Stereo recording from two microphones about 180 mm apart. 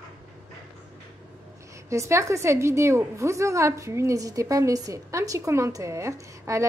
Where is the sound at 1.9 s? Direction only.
15° right (ahead or behind).